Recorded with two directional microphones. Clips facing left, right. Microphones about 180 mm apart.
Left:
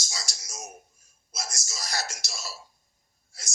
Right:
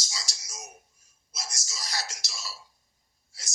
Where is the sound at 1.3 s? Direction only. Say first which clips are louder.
Left 4 dB; 45° left (ahead or behind).